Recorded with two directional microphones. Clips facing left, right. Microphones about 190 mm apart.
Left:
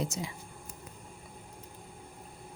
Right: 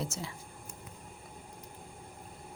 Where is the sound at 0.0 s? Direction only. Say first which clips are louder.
Left 3 dB; 15° left (ahead or behind).